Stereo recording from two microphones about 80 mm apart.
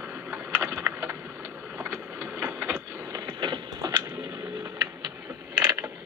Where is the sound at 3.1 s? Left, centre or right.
Right.